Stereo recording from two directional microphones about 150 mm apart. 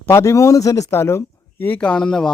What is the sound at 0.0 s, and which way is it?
Speech, 20° left (ahead or behind).